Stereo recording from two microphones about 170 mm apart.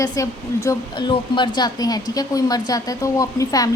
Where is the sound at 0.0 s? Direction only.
20° left (ahead or behind).